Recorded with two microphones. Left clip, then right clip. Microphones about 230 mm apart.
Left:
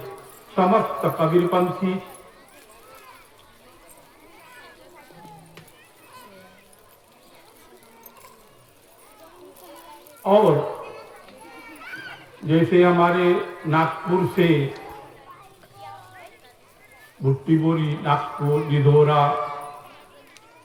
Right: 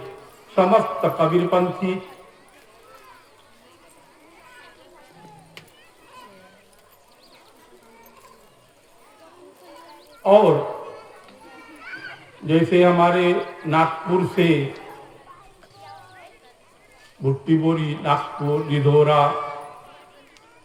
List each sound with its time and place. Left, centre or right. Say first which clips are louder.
0.5 s a man's voice: right 2 dB; right
10.2 s speech: right 3 dB; right
12.5 s a man's voice: right 1 dB; right
17.2 s a man's voice: right 1 dB; right